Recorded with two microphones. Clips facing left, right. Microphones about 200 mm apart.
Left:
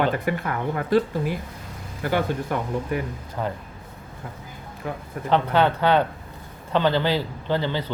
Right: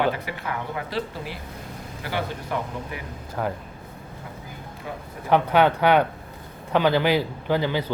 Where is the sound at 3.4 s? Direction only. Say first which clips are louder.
Right 1 dB; 5° right (ahead or behind).